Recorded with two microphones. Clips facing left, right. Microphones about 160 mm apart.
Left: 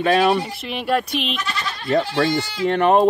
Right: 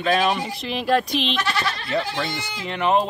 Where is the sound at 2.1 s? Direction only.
60° left (ahead or behind).